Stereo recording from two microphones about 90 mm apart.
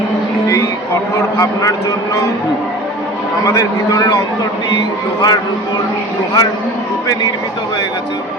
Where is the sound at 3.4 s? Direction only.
35° left (ahead or behind).